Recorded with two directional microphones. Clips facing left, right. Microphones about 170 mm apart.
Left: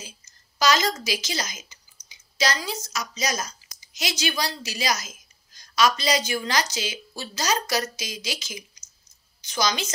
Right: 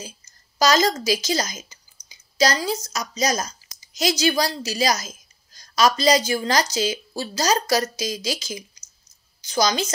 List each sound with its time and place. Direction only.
0.0 s a woman's voice: 40° right (ahead or behind)